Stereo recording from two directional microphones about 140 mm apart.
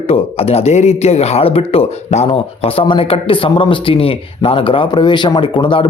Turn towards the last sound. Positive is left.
turn(degrees=35)  # may be behind; listen again after turning